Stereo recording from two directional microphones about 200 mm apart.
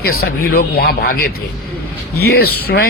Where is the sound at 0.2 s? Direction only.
50° left (ahead or behind).